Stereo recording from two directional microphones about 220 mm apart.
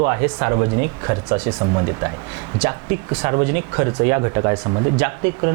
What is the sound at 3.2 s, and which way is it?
Speech, 15° right (ahead or behind).